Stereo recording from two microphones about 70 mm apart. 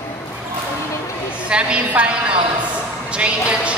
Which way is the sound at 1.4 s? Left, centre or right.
Centre.